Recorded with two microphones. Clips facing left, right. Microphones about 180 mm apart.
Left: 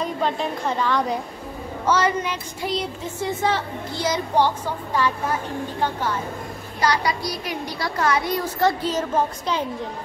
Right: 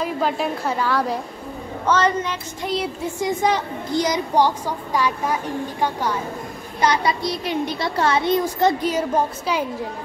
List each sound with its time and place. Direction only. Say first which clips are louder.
0.0 s a woman's voice: right 2 dB; 5° right (ahead or behind)
1.9 s a woman's voice: right 1 dB; 10° left (ahead or behind); by 6.1 s 15° right (ahead or behind)
6.8 s a child's voice: right 2 dB; 25° right (ahead or behind)